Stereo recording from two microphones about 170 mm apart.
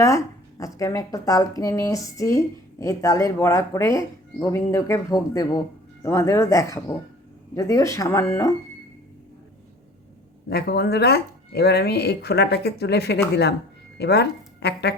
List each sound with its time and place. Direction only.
0.6 s a woman's voice: 20° left (ahead or behind)
10.5 s speech: 65° left (ahead or behind)